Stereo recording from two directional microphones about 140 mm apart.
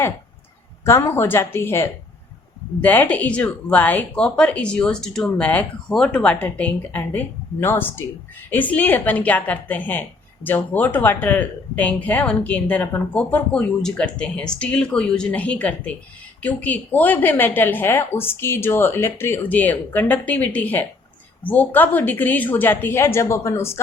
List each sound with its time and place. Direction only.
0.9 s a woman's voice: 15° left (ahead or behind)